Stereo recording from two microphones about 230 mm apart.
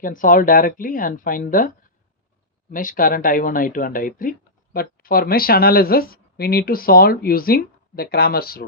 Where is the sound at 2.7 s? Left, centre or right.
Left.